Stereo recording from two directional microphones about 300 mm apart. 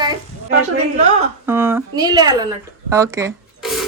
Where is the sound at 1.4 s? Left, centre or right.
Centre.